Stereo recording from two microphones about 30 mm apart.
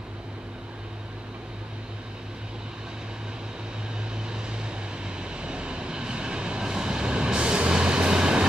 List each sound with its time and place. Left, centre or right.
4.3 s vehicle: right
6.6 s train: right